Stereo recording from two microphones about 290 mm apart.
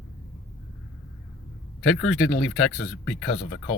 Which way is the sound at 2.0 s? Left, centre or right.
Centre.